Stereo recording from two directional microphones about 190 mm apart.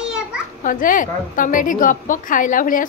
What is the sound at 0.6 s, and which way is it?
A woman's voice, 45° left (ahead or behind).